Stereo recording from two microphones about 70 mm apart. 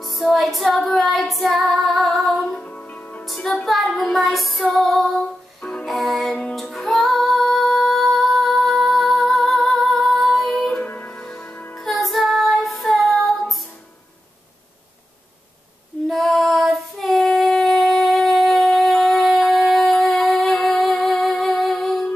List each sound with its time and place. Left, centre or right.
0.0 s music: centre
0.8 s female singing: centre
2.5 s music: centre
3.6 s female singing: centre
5.6 s music: centre
5.9 s music: centre
10.7 s music: left
11.7 s music: centre
16.1 s female singing: centre
18.9 s shofar: centre
19.5 s music: centre